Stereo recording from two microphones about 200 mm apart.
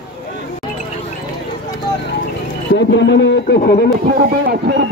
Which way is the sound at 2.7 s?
60° left (ahead or behind).